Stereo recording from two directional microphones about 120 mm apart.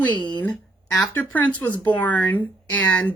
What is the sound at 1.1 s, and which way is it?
Speech, 15° left (ahead or behind).